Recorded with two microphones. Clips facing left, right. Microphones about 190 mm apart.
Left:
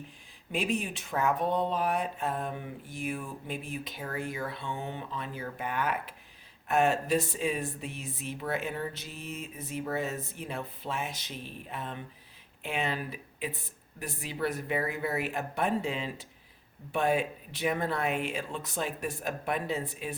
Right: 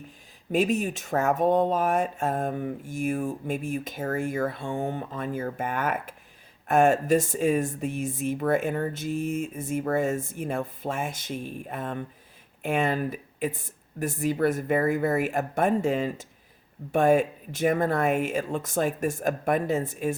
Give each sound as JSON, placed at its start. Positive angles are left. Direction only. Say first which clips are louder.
{"t": 0.5, "sound": "speech", "louder": "right 7 dB", "side_deg": -45}